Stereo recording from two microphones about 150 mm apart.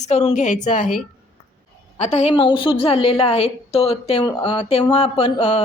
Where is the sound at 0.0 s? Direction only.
45° left (ahead or behind).